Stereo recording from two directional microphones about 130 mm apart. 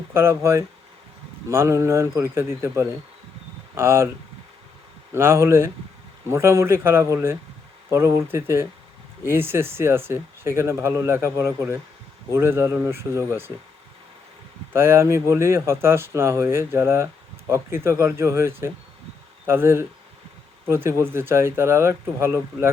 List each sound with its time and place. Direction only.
0.1 s speech: 20° right (ahead or behind)
5.1 s speech: 20° right (ahead or behind)
14.7 s speech: 20° right (ahead or behind)